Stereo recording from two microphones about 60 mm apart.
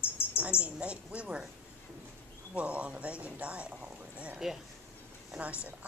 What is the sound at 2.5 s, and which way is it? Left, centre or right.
A woman's voice, right.